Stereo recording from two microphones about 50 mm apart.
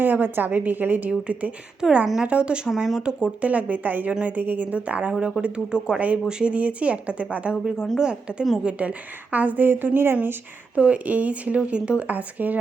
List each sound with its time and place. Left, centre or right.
0.0 s speech: right
1.8 s speech: centre
2.6 s a woman's voice: centre
3.0 s a woman's voice: centre; by 10.2 s right
10.8 s speech: right